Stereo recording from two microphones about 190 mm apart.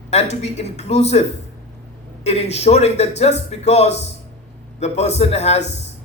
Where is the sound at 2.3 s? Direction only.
35° left (ahead or behind).